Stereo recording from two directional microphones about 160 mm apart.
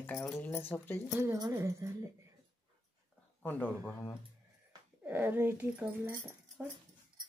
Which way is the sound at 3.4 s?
10° left (ahead or behind).